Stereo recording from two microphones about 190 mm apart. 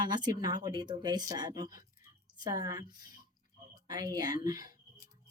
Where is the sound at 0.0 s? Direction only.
20° right (ahead or behind).